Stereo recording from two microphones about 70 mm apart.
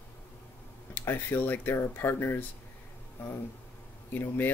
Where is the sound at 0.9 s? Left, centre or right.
Left.